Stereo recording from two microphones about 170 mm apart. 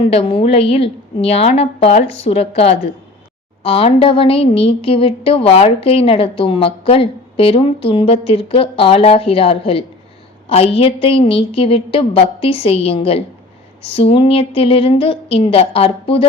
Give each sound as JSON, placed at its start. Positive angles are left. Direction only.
{"t": 0.0, "sound": "speech", "side_deg": 35}
{"t": 3.6, "sound": "speech", "side_deg": 35}